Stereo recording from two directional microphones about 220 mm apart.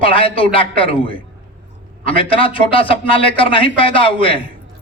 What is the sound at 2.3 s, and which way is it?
A man's voice, 25° left (ahead or behind).